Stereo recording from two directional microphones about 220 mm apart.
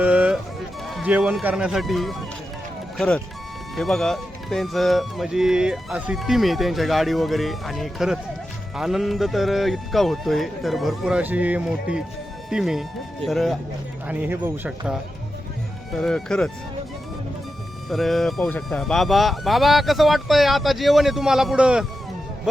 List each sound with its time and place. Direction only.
0.0 s music: 5° right (ahead or behind)
0.9 s speech: 5° right (ahead or behind)
3.8 s speech: centre (ahead or behind)
15.9 s speech: centre (ahead or behind)
17.8 s speech: centre (ahead or behind)